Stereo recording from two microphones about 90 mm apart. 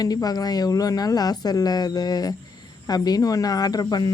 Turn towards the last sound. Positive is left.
turn(degrees=50)  # may be behind; listen again after turning